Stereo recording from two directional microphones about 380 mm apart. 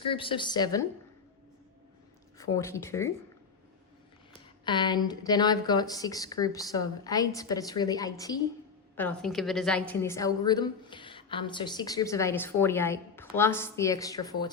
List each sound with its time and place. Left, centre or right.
0.0 s a woman's voice: centre
2.4 s a woman's voice: centre
4.6 s a woman's voice: centre